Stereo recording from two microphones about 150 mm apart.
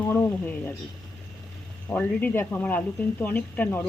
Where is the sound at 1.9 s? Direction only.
10° left (ahead or behind).